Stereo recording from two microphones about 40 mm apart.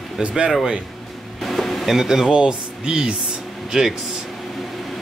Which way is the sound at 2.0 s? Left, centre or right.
Centre.